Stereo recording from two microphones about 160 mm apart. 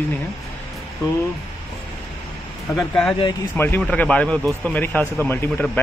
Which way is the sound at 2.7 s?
5° left (ahead or behind).